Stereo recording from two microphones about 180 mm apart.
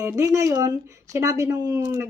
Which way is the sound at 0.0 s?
15° right (ahead or behind).